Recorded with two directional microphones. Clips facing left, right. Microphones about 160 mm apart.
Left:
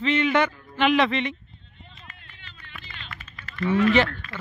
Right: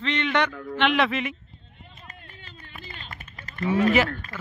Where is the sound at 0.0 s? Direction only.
5° left (ahead or behind).